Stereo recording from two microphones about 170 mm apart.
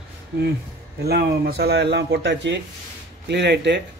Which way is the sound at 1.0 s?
70° right (ahead or behind).